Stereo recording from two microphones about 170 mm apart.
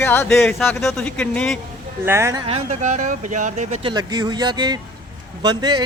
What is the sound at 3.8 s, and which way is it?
Speech, 25° right (ahead or behind).